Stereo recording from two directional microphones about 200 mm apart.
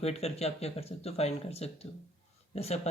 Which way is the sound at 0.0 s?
30° left (ahead or behind).